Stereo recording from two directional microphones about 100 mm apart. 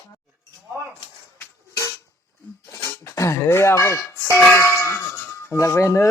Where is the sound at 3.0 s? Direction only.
30° left (ahead or behind).